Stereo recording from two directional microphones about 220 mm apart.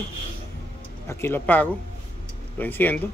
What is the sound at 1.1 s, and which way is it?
Speech, 10° left (ahead or behind).